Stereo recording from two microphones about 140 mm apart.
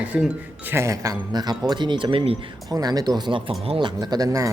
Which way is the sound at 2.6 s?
25° right (ahead or behind).